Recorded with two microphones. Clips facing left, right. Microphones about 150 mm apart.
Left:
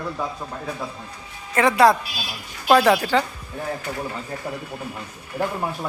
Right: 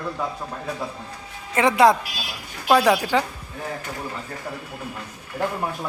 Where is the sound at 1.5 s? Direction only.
20° right (ahead or behind).